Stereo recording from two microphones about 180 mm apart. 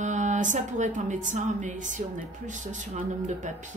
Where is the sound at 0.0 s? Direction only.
40° right (ahead or behind).